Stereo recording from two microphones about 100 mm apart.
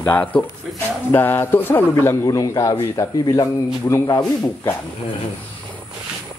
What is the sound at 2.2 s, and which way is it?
A man's voice, 35° left (ahead or behind).